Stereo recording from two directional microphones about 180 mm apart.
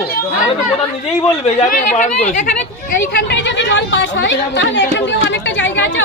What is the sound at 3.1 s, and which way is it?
Speech, 75° left (ahead or behind).